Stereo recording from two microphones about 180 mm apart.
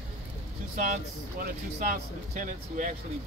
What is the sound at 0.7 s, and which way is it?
Speech, 50° right (ahead or behind).